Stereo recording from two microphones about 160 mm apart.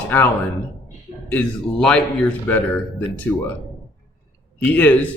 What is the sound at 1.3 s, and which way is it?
Speech, 5° left (ahead or behind).